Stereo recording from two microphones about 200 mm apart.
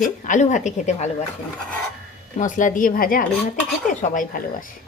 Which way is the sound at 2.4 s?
40° left (ahead or behind).